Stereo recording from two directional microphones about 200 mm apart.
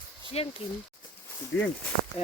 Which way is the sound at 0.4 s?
30° left (ahead or behind).